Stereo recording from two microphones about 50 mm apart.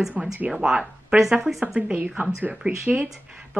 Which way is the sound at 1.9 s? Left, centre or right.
Right.